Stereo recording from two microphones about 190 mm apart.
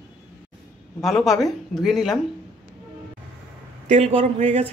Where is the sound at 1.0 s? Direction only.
Centre (ahead or behind).